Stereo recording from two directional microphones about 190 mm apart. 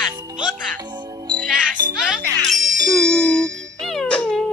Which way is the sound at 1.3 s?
5° left (ahead or behind).